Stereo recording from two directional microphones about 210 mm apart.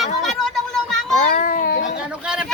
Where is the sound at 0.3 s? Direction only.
Centre (ahead or behind).